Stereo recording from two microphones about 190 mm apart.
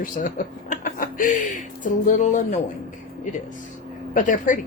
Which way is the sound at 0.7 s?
45° left (ahead or behind).